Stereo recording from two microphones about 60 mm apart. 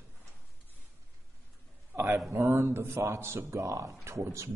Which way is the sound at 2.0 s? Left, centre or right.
Right.